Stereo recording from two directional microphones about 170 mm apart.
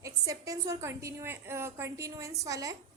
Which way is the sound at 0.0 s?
20° right (ahead or behind).